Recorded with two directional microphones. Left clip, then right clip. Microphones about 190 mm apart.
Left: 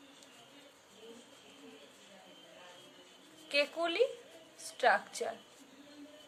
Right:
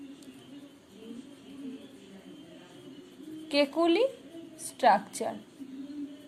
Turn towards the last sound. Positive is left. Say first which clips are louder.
# right 6 dB
turn(degrees=-20)  # may be behind; listen again after turning